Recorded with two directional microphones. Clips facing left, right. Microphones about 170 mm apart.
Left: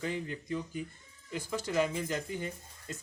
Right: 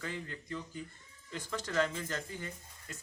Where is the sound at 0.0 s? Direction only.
15° left (ahead or behind).